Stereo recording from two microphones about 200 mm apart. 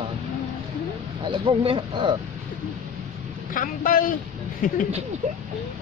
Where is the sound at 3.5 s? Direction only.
45° left (ahead or behind).